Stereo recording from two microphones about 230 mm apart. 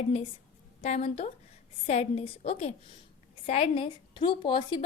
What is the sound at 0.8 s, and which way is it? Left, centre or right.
A woman's voice, left.